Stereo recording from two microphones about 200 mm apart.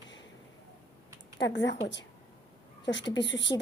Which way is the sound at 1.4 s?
60° left (ahead or behind).